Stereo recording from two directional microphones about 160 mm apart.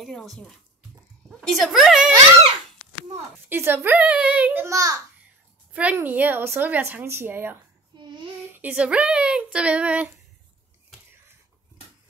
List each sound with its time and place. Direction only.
0.0 s a woman's voice: centre (ahead or behind)
3.4 s speech: 15° right (ahead or behind)
5.7 s speech: 10° right (ahead or behind)
7.9 s a sound: 30° right (ahead or behind)
8.5 s speech: 10° right (ahead or behind)